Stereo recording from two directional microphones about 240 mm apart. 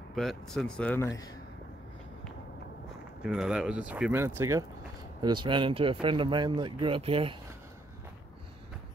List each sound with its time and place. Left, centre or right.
0.1 s speech: centre
3.2 s speech: centre; by 7.3 s right